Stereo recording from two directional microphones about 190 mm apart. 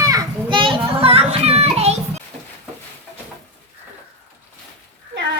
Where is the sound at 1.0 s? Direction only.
30° right (ahead or behind).